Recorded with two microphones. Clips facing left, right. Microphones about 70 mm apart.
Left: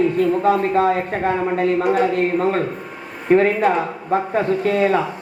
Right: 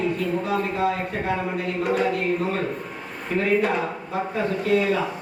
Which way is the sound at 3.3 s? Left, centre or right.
Left.